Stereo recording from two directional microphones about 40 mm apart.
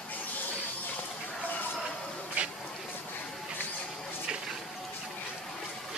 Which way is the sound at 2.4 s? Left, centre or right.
Right.